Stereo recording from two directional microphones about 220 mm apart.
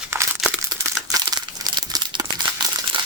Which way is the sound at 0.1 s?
10° right (ahead or behind).